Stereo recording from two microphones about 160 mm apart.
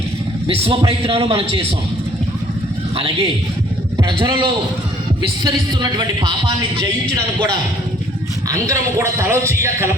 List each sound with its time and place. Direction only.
0.4 s a man's voice: 35° right (ahead or behind)
2.9 s a man's voice: 35° right (ahead or behind)
8.4 s a man's voice: 20° right (ahead or behind)